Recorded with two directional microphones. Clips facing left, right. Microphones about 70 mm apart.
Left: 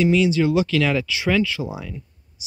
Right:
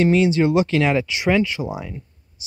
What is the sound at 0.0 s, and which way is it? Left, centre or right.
Speech, right.